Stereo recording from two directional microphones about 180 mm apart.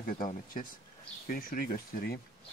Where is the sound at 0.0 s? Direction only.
50° left (ahead or behind).